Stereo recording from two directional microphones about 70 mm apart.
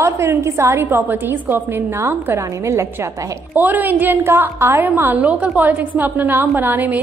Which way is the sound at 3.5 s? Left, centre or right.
Right.